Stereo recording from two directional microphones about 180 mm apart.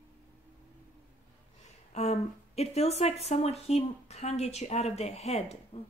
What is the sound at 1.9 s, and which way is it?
Speech, 40° left (ahead or behind).